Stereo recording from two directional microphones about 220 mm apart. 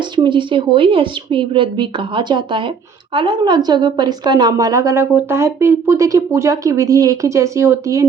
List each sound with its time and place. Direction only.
0.2 s a woman's voice: 20° right (ahead or behind)